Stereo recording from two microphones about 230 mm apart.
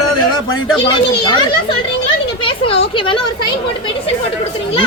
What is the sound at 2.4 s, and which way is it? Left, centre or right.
Speech, left.